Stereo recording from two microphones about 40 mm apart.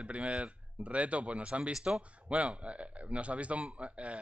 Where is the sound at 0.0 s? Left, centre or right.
Right.